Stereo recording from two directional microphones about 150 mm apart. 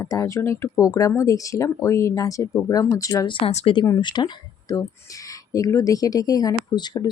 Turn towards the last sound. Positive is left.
turn(degrees=30)  # may be behind; listen again after turning